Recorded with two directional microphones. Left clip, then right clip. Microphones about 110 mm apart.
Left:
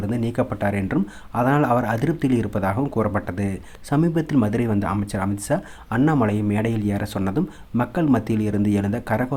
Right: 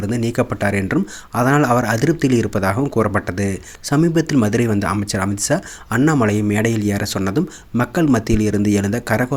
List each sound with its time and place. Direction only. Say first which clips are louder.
0.0 s speech: right 4 dB; 20° right (ahead or behind)